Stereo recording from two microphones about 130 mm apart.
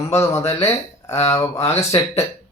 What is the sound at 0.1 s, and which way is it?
Speech, 20° left (ahead or behind).